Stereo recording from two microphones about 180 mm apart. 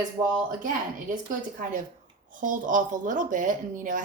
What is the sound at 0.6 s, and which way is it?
Speech, 50° right (ahead or behind).